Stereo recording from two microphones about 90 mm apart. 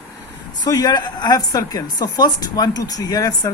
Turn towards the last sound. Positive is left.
turn(degrees=45)  # may be behind; listen again after turning